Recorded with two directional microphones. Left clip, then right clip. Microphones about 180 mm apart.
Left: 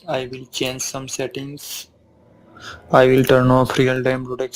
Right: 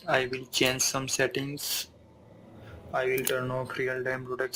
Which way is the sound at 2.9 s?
60° left (ahead or behind).